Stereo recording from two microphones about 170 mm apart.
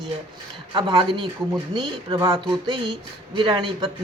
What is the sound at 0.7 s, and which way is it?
Speech, 25° right (ahead or behind).